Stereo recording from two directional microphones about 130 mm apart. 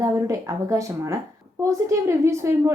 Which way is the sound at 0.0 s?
25° right (ahead or behind).